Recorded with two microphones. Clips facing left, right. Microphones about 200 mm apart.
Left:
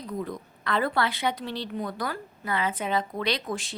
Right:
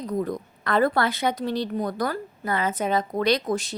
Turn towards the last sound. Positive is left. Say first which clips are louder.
# right 7 dB
turn(degrees=-40)  # may be behind; listen again after turning